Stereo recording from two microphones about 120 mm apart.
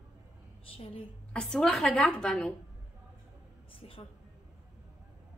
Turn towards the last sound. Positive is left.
turn(degrees=50)  # may be behind; listen again after turning